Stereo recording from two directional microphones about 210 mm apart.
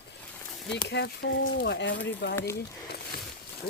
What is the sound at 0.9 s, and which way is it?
Speech, 55° left (ahead or behind).